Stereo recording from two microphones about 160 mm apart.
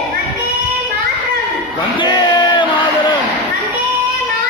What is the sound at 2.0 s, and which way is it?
Crowd, 30° left (ahead or behind).